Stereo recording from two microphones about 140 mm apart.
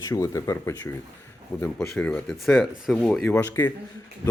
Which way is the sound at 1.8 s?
10° left (ahead or behind).